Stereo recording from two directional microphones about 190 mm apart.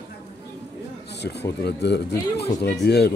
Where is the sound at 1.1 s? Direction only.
60° left (ahead or behind).